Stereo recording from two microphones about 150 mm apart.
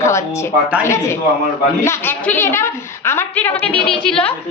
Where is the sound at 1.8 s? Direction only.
15° left (ahead or behind).